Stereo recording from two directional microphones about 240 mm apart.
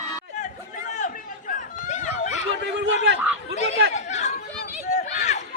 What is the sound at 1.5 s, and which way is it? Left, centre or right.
Chatter, left.